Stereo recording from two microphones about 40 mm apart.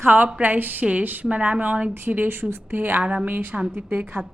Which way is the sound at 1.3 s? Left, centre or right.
Right.